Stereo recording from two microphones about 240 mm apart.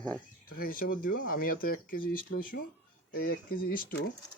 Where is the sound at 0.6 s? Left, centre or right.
Left.